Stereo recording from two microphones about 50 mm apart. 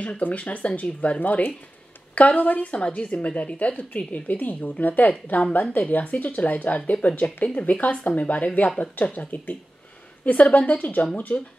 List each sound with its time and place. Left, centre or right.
0.2 s a woman's voice: left